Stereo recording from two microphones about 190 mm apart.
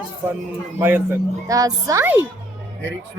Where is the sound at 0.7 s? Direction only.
10° right (ahead or behind).